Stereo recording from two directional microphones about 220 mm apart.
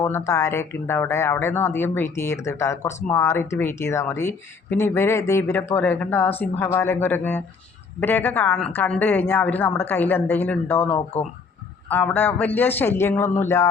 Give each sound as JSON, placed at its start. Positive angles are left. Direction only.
{"t": 0.0, "sound": "speech", "side_deg": 10}
{"t": 10.9, "sound": "speech", "side_deg": 30}
{"t": 11.9, "sound": "speech", "side_deg": 10}